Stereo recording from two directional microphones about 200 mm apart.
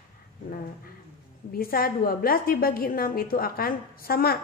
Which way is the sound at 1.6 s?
45° left (ahead or behind).